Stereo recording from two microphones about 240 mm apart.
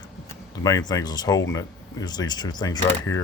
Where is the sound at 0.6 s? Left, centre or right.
Centre.